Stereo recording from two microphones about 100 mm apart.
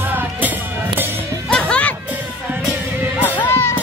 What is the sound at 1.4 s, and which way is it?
Music, 10° left (ahead or behind).